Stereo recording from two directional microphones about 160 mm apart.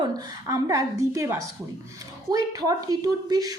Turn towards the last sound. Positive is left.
turn(degrees=-25)  # may be behind; listen again after turning